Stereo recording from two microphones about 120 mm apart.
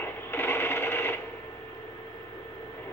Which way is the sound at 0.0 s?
20° left (ahead or behind).